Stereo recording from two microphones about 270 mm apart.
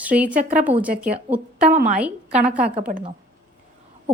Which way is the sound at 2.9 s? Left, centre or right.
Right.